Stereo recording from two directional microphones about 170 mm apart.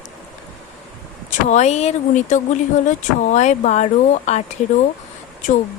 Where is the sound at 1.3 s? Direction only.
45° left (ahead or behind).